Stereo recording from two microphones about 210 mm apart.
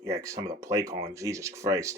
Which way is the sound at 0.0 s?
15° right (ahead or behind).